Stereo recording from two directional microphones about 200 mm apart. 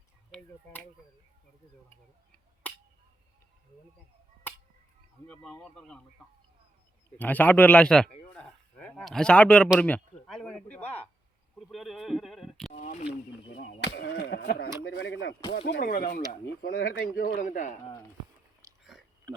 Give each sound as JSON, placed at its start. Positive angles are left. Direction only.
{"t": 0.3, "sound": "speech", "side_deg": 5}
{"t": 5.3, "sound": "a man's voice", "side_deg": 5}
{"t": 7.2, "sound": "a man's voice", "side_deg": 10}
{"t": 12.7, "sound": "speech", "side_deg": 35}
{"t": 13.8, "sound": "speech", "side_deg": 55}
{"t": 18.8, "sound": "a sound", "side_deg": 0}